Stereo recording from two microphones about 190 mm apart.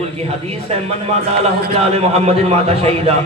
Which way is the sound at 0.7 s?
35° right (ahead or behind).